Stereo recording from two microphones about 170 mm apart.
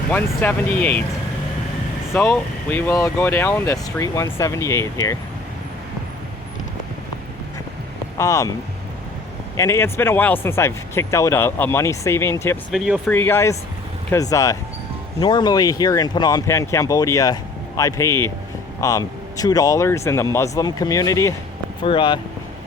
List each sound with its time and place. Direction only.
0.1 s speech: 10° left (ahead or behind)
2.1 s speech: 5° left (ahead or behind)
8.2 s speech: 20° left (ahead or behind)
9.6 s speech: 15° left (ahead or behind)
12.7 s speech: centre (ahead or behind)
13.1 s speech: 10° left (ahead or behind); by 22.2 s 30° left (ahead or behind)